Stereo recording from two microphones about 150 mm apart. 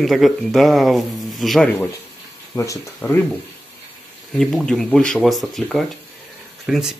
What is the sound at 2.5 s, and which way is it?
Speech, 20° left (ahead or behind).